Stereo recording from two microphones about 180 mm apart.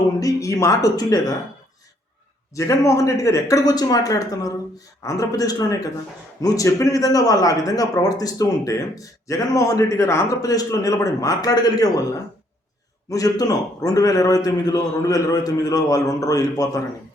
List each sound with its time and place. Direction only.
0.2 s speech: 20° left (ahead or behind)
2.6 s speech: 15° left (ahead or behind)
13.1 s speech: 20° left (ahead or behind)